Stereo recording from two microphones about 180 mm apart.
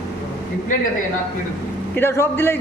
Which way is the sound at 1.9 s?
15° left (ahead or behind).